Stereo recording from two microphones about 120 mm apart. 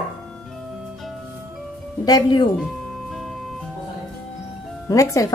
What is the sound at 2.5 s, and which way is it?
Music, centre (ahead or behind).